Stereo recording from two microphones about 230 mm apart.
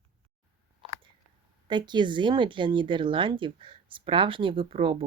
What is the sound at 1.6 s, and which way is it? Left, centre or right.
Speech, centre.